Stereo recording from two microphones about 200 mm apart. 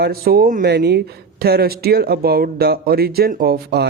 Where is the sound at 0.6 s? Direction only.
55° right (ahead or behind).